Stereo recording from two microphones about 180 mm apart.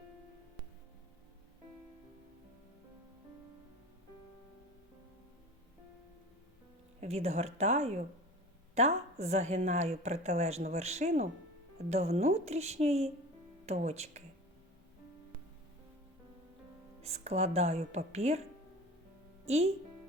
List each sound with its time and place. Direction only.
7.0 s a woman's voice: 35° right (ahead or behind)
17.0 s a woman's voice: 35° right (ahead or behind)
19.5 s a woman's voice: 35° right (ahead or behind)